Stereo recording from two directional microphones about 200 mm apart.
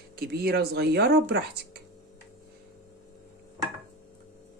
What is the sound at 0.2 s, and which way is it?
Speech, 50° right (ahead or behind).